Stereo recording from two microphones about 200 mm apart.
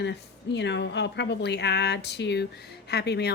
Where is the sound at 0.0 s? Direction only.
60° left (ahead or behind).